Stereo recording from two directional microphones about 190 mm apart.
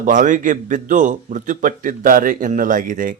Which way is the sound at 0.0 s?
40° right (ahead or behind).